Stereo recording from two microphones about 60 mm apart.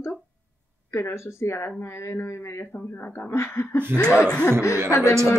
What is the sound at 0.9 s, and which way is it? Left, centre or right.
A woman's voice, left.